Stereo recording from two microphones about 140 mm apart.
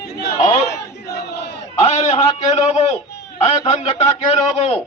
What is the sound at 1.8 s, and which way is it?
A man's voice, 50° left (ahead or behind).